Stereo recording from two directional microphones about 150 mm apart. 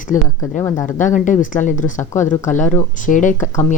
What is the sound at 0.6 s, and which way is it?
Speech, 15° left (ahead or behind).